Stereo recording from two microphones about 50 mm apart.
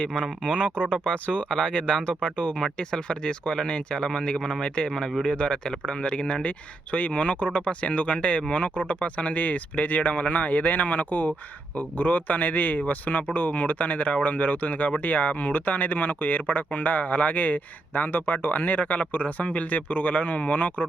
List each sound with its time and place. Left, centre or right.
0.2 s speech: left